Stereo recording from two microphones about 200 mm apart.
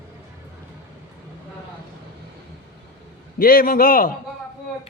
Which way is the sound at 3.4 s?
45° left (ahead or behind).